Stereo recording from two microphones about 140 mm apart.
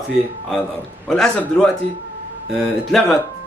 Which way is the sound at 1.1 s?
5° left (ahead or behind).